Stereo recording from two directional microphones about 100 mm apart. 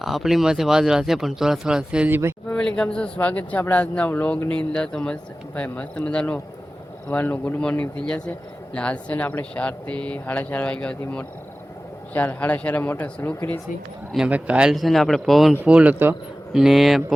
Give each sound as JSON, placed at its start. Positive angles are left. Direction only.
{"t": 0.0, "sound": "speech", "side_deg": 0}
{"t": 2.0, "sound": "speech", "side_deg": -20}
{"t": 2.5, "sound": "speech", "side_deg": 10}
{"t": 12.1, "sound": "speech", "side_deg": 15}
{"t": 14.3, "sound": "speech", "side_deg": -15}
{"t": 15.6, "sound": "speech", "side_deg": -10}
{"t": 16.5, "sound": "speech", "side_deg": -5}